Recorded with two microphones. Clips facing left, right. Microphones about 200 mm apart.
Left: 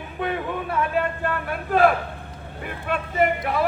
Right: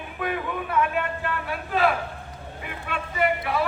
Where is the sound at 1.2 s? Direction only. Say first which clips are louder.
Left 3 dB; 50° left (ahead or behind).